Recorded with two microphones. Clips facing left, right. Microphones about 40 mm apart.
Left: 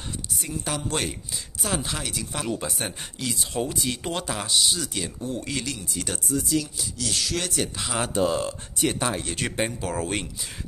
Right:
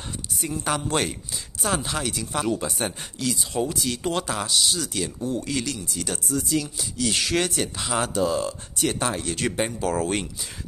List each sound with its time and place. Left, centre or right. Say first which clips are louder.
0.4 s a woman's voice: right 5 dB; centre
1.6 s speech: right 3 dB; centre
3.2 s speech: right 2 dB; centre
5.3 s speech: right 2 dB; centre
5.7 s speech: right 1 dB; centre
7.0 s speech: right 5 dB; right
7.5 s speech: right 2 dB; centre
8.1 s speech: even; left
8.7 s speech: even; centre